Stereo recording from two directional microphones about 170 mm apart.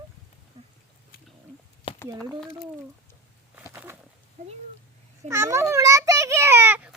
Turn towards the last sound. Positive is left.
turn(degrees=-10)  # may be behind; listen again after turning